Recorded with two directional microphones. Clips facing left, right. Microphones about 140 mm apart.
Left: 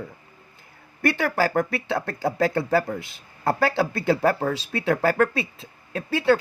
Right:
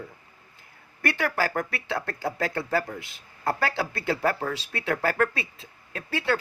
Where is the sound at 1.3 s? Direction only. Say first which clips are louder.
Left 5 dB; 25° left (ahead or behind).